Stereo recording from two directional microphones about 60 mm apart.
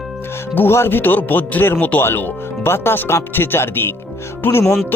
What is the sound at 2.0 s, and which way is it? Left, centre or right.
Speech, left.